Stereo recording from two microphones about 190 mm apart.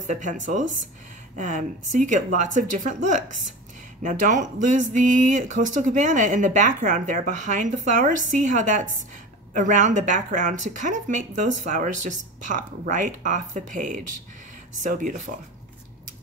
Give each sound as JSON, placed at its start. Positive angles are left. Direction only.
{"t": 0.0, "sound": "speech", "side_deg": -40}